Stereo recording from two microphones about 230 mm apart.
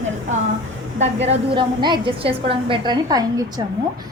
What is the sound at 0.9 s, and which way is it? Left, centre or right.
A woman's voice, right.